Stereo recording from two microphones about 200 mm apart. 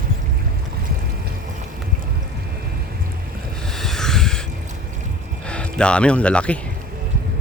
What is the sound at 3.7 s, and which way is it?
Rub, centre (ahead or behind).